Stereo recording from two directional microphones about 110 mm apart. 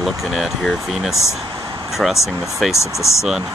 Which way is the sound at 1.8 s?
Centre (ahead or behind).